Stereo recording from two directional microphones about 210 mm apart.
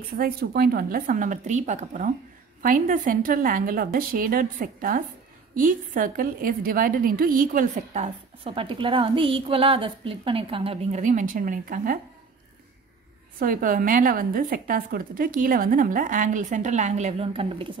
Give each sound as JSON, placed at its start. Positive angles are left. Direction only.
{"t": 0.2, "sound": "a woman's voice", "side_deg": -45}
{"t": 13.4, "sound": "a woman's voice", "side_deg": -40}